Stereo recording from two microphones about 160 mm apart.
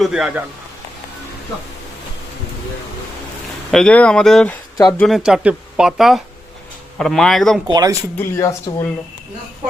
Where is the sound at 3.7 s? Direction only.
5° left (ahead or behind).